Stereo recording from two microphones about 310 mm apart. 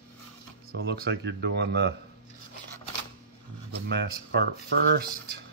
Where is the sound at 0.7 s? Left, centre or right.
Right.